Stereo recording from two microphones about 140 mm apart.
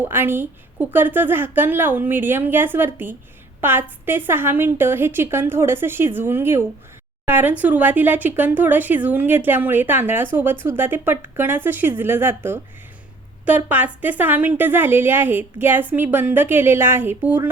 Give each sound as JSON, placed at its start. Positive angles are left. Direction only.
{"t": 0.0, "sound": "speech", "side_deg": -15}
{"t": 13.7, "sound": "speech", "side_deg": -10}